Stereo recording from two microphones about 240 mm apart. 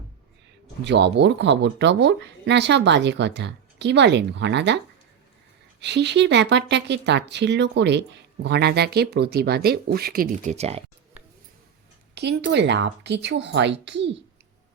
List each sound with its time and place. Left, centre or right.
0.9 s speech: right
5.8 s speech: right
12.1 s speech: right